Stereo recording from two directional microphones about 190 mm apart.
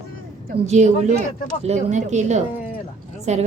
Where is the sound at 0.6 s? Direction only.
35° right (ahead or behind).